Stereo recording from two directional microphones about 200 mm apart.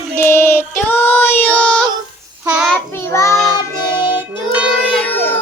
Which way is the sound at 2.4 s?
5° right (ahead or behind).